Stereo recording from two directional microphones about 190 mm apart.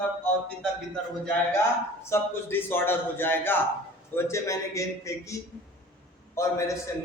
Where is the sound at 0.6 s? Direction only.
5° left (ahead or behind).